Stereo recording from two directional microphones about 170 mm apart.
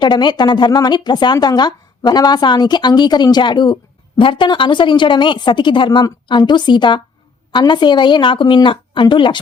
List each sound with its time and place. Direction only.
0.0 s speech: 25° left (ahead or behind)